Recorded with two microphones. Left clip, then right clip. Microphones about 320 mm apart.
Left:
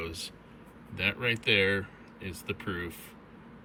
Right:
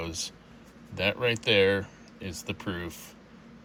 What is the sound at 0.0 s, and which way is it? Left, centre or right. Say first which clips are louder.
Speech: right 3 dB; centre.